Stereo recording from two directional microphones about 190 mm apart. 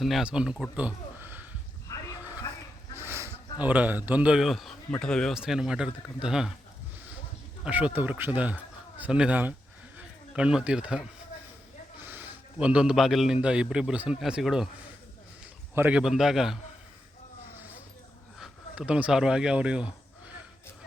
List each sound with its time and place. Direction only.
0.0 s a man's voice: centre (ahead or behind)
0.8 s a sound: 10° right (ahead or behind)
1.9 s a sound: 15° left (ahead or behind)
2.9 s a man's voice: 15° right (ahead or behind)
7.6 s a man's voice: 5° right (ahead or behind)
12.0 s a man's voice: 10° right (ahead or behind)
18.3 s speech: centre (ahead or behind)